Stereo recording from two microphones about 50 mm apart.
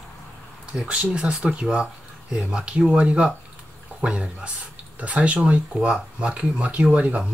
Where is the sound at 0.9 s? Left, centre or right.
Right.